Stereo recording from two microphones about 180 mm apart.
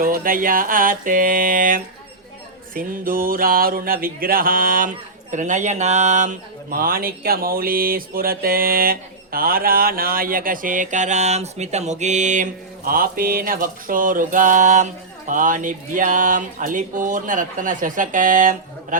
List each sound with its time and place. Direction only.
0.0 s speech: 50° right (ahead or behind)